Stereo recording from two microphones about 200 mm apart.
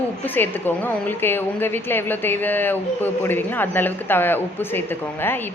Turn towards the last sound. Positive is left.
turn(degrees=10)  # may be behind; listen again after turning